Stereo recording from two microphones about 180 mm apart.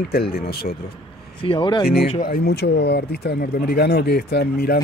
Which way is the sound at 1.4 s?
30° left (ahead or behind).